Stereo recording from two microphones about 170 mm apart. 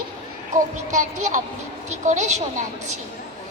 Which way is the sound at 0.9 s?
45° right (ahead or behind).